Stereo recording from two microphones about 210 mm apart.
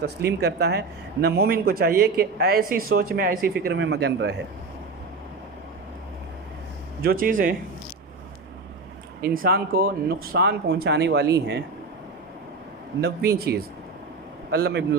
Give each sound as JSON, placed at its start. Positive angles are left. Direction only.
{"t": 0.0, "sound": "speech", "side_deg": -50}
{"t": 7.0, "sound": "speech", "side_deg": -45}
{"t": 9.2, "sound": "speech", "side_deg": -45}
{"t": 13.0, "sound": "speech", "side_deg": -50}